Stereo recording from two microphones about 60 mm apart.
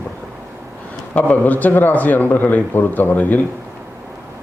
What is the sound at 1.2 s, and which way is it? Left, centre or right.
A man's voice, left.